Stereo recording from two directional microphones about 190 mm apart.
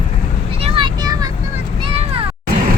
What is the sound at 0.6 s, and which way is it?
Vehicle, 30° right (ahead or behind).